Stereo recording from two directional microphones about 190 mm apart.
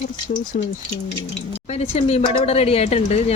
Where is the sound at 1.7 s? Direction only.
35° left (ahead or behind).